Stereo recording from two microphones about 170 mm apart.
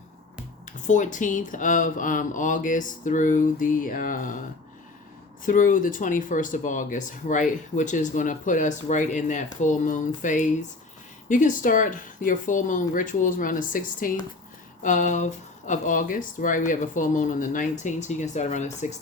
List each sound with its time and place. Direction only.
0.6 s speech: 45° left (ahead or behind)
5.5 s speech: 50° left (ahead or behind)